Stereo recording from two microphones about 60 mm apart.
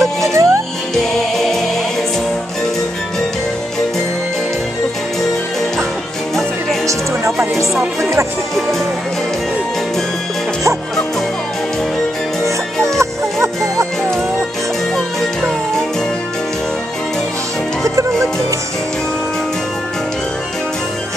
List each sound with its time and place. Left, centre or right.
0.0 s music: right
0.9 s music: centre
8.0 s music: right
12.8 s music: right
17.8 s music: right